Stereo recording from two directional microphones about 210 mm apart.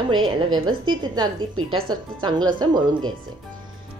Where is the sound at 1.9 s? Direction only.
20° right (ahead or behind).